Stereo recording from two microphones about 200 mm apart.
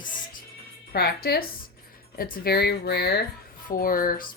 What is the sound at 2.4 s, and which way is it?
Speech, 50° left (ahead or behind).